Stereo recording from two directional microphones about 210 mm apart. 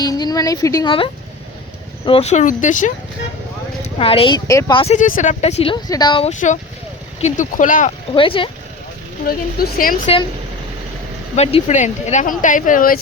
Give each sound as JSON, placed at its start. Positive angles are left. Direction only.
{"t": 0.0, "sound": "a woman's voice", "side_deg": 20}
{"t": 3.8, "sound": "a woman's voice", "side_deg": 25}
{"t": 4.9, "sound": "speech", "side_deg": 40}
{"t": 7.2, "sound": "speech", "side_deg": 35}
{"t": 8.1, "sound": "a woman's voice", "side_deg": 25}
{"t": 9.2, "sound": "a woman's voice", "side_deg": 45}
{"t": 11.3, "sound": "speech", "side_deg": 35}